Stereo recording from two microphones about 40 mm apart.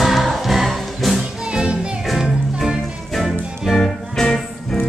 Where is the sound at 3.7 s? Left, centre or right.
Centre.